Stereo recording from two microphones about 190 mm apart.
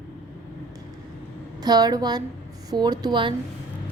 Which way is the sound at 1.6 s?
20° right (ahead or behind).